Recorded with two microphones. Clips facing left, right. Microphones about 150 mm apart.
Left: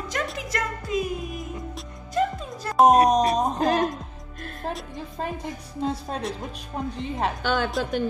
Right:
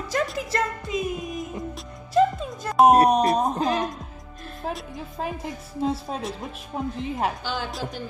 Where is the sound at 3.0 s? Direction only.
5° right (ahead or behind).